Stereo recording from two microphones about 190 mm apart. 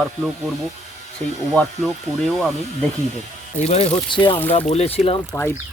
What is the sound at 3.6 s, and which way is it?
Speech, 35° left (ahead or behind).